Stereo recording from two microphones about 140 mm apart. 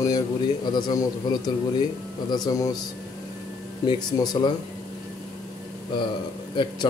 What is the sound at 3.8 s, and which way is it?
Speech, 30° left (ahead or behind).